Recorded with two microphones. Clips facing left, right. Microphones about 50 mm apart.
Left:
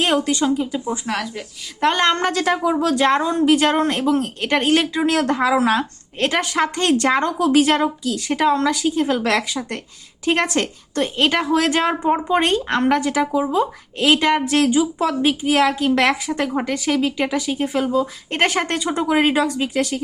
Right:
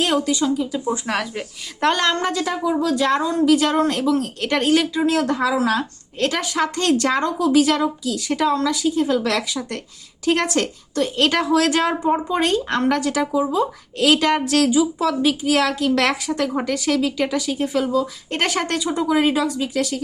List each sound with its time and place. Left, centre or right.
0.0 s speech: left
0.9 s speech: centre
2.1 s a woman's voice: left
4.7 s speech: left
11.2 s a woman's voice: centre
11.5 s a woman's voice: left
14.7 s speech: left
16.5 s speech: centre
18.8 s speech: left